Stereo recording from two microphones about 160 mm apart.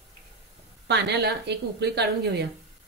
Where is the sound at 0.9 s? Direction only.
90° right.